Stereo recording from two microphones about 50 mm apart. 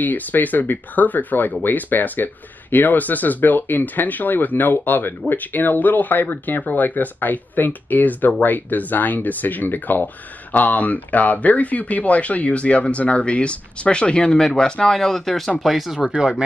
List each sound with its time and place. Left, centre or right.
0.0 s speech: left; by 16.1 s centre
16.2 s speech: centre